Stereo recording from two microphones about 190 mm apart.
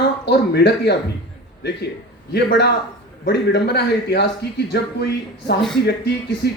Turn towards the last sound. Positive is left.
turn(degrees=60)  # may be behind; listen again after turning